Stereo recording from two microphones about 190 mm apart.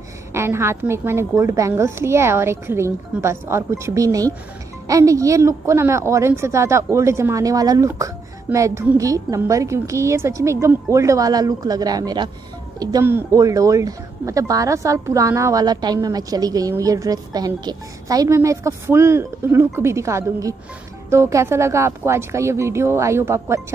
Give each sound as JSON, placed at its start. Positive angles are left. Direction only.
{"t": 0.3, "sound": "speech", "side_deg": -15}